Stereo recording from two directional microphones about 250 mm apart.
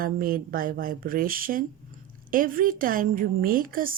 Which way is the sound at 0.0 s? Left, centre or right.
Right.